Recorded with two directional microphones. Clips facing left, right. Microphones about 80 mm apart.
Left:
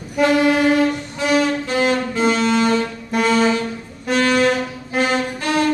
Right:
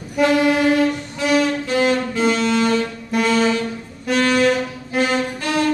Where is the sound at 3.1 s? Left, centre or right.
Left.